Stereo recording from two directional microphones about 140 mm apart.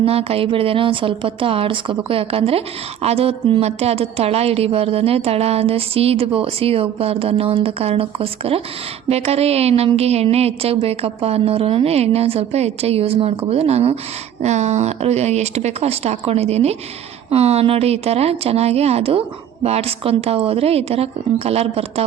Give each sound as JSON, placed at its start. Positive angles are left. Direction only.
{"t": 0.0, "sound": "a woman's voice", "side_deg": -45}